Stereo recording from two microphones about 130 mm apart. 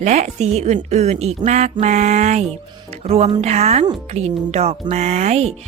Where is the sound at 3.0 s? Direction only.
55° right (ahead or behind).